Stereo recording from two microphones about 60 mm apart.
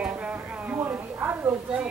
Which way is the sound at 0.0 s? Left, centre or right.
Right.